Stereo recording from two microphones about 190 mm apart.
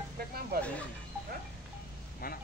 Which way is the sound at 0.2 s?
55° right (ahead or behind).